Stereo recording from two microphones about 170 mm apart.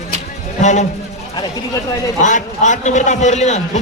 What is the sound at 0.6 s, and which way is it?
Speech, 45° left (ahead or behind).